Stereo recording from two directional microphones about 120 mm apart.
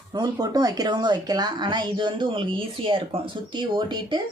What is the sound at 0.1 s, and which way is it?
Speech, 30° right (ahead or behind).